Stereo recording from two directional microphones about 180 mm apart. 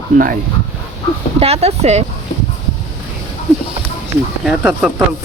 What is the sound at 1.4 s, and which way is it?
Speech, 35° right (ahead or behind).